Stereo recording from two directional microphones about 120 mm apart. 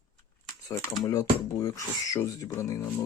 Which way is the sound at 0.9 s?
30° left (ahead or behind).